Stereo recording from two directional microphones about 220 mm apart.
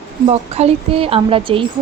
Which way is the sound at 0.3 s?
30° right (ahead or behind).